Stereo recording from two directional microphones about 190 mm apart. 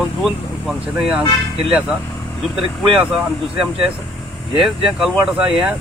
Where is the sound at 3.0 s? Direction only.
5° right (ahead or behind).